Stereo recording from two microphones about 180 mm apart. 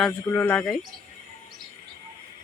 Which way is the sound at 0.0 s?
10° left (ahead or behind).